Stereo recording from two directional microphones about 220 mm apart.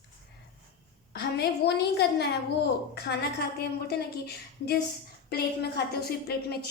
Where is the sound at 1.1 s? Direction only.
45° left (ahead or behind).